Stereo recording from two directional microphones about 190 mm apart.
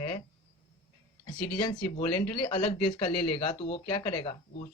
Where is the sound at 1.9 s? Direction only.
30° left (ahead or behind).